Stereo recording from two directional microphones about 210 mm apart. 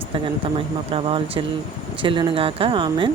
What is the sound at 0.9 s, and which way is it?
Speech, 25° right (ahead or behind).